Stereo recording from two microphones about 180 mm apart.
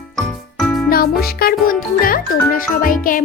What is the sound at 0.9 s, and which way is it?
A child's voice, 55° left (ahead or behind).